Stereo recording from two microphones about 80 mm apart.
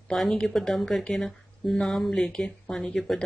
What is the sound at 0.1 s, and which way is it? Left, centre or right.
A woman's voice, centre.